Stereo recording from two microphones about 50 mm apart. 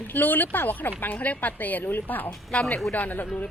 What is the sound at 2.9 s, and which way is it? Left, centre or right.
Speech, left.